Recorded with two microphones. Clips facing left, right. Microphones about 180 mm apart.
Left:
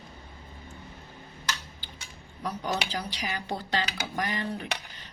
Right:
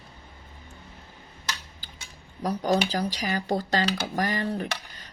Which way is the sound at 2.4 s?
40° right (ahead or behind).